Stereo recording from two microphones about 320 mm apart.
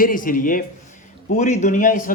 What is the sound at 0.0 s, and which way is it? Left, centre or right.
Speech, left.